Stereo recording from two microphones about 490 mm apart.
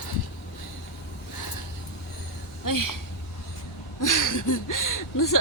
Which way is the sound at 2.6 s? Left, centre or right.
Left.